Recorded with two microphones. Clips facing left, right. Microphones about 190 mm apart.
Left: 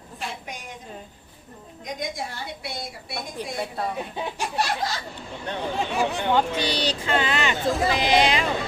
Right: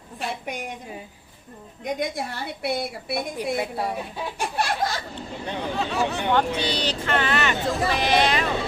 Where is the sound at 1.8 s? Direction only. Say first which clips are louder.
Right 4 dB; 60° right (ahead or behind).